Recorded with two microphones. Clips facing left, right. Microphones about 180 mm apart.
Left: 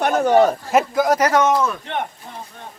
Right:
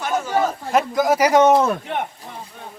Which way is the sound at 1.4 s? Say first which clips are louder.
Right 4 dB; 25° right (ahead or behind).